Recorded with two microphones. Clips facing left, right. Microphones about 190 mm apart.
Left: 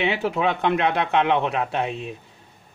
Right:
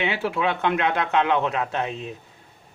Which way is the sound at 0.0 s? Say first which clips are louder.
Left 2 dB; 40° left (ahead or behind).